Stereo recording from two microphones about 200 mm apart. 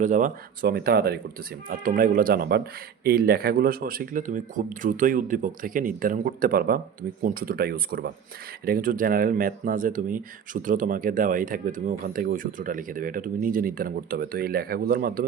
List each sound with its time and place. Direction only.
0.0 s speech: 40° right (ahead or behind)